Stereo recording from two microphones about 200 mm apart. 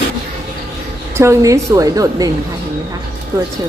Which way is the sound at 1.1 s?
15° right (ahead or behind).